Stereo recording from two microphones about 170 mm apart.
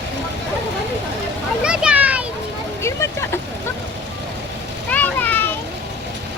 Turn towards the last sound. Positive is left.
turn(degrees=10)  # may be behind; listen again after turning